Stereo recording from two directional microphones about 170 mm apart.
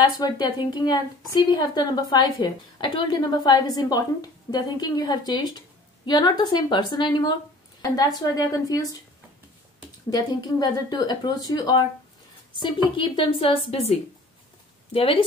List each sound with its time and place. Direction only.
0.2 s a woman's voice: 25° left (ahead or behind)
10.0 s a woman's voice: 25° left (ahead or behind)